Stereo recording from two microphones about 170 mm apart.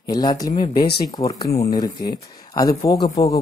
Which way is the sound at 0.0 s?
25° left (ahead or behind).